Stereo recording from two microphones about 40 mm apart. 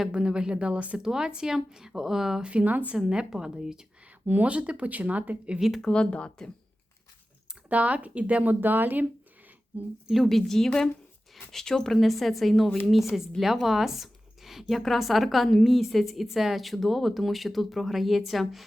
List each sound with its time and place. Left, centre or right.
0.1 s speech: right
0.9 s speech: centre
2.4 s speech: right
2.9 s speech: centre
4.4 s speech: right
5.5 s speech: centre
5.8 s speech: left
7.7 s speech: right
8.6 s speech: right
9.7 s speech: right
10.2 s a woman's voice: centre